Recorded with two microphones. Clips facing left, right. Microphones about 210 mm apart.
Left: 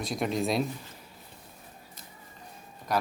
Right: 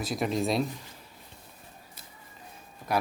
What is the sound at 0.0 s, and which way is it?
Speech, centre (ahead or behind).